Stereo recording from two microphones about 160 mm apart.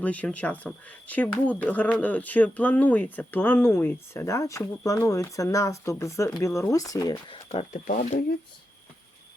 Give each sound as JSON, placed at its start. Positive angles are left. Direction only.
{"t": 0.0, "sound": "speech", "side_deg": 10}
{"t": 7.3, "sound": "speech", "side_deg": 40}